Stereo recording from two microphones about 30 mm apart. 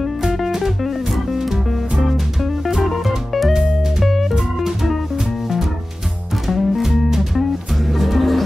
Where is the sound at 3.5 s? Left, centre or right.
Centre.